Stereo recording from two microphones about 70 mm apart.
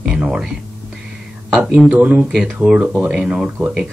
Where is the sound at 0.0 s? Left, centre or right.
Centre.